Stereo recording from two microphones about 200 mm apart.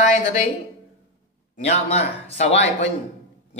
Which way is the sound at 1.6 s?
30° left (ahead or behind).